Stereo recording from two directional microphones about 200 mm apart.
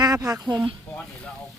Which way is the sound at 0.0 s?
20° right (ahead or behind).